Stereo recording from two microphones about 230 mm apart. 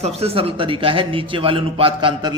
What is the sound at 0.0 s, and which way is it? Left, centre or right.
A man's voice, right.